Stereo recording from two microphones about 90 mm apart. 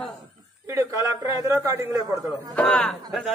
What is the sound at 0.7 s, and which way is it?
A man's voice, 30° right (ahead or behind).